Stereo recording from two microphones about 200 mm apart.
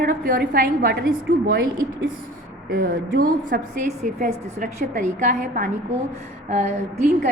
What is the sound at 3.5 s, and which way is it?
A woman's voice, 50° right (ahead or behind).